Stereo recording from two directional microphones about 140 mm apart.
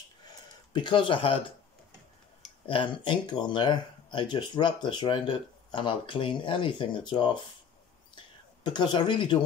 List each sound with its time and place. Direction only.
0.7 s speech: 35° left (ahead or behind)
2.6 s speech: 35° left (ahead or behind)
8.6 s speech: 30° left (ahead or behind)